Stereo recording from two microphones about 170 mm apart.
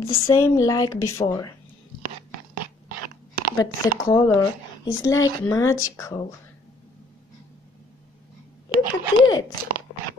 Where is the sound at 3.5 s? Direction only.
20° left (ahead or behind).